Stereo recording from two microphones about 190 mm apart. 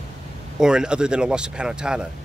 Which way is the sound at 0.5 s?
5° right (ahead or behind).